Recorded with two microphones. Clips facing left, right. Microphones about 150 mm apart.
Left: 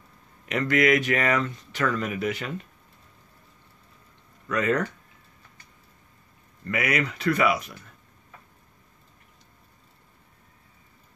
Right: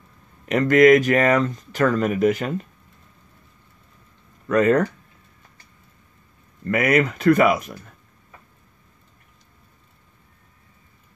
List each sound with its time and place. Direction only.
0.5 s speech: 45° right (ahead or behind)
4.5 s speech: 45° right (ahead or behind)
6.6 s speech: 50° right (ahead or behind)